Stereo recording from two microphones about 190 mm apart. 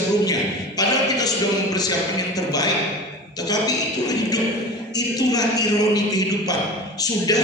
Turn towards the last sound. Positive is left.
turn(degrees=20)  # may be behind; listen again after turning